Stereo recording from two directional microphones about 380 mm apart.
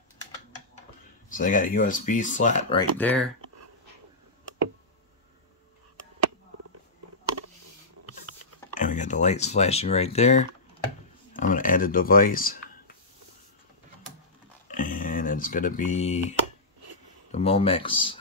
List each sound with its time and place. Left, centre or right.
1.3 s speech: left; by 3.3 s centre
8.7 s speech: centre
14.7 s a sound: left
17.3 s speech: centre